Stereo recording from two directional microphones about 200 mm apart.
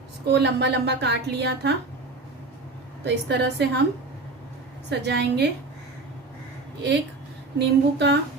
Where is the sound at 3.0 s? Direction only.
55° right (ahead or behind).